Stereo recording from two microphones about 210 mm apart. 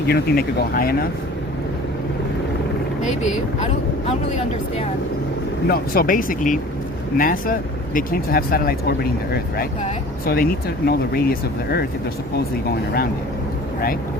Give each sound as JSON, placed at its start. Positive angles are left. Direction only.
{"t": 0.1, "sound": "speech", "side_deg": 45}
{"t": 5.6, "sound": "speech", "side_deg": 45}